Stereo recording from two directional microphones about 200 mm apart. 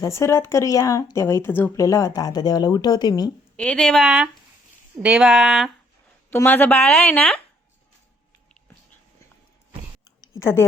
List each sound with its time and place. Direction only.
0.0 s speech: 15° left (ahead or behind)
3.6 s speech: 5° left (ahead or behind)
6.3 s speech: 10° left (ahead or behind)
10.0 s a sound: 15° left (ahead or behind)